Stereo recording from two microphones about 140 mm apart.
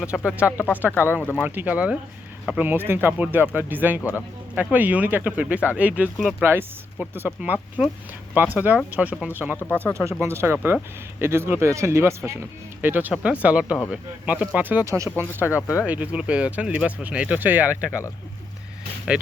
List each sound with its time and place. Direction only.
0.3 s speech: 10° right (ahead or behind)
0.5 s speech: 15° left (ahead or behind)
1.5 s speech: 10° right (ahead or behind)
15.4 s speech: 20° left (ahead or behind)
15.9 s speech: 10° right (ahead or behind)
19.1 s speech: 10° right (ahead or behind)